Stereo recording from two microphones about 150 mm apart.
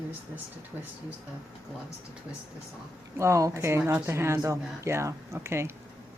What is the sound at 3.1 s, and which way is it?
Speech, 20° right (ahead or behind).